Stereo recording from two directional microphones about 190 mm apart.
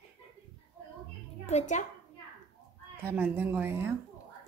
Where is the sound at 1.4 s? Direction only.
40° left (ahead or behind).